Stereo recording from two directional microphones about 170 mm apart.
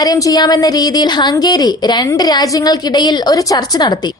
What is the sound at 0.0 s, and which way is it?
A woman's voice, 20° left (ahead or behind).